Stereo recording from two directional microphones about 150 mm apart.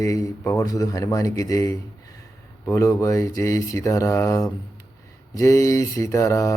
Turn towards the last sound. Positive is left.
turn(degrees=20)  # may be behind; listen again after turning